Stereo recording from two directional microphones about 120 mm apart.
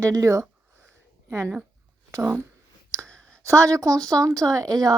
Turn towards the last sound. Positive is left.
turn(degrees=-30)  # may be behind; listen again after turning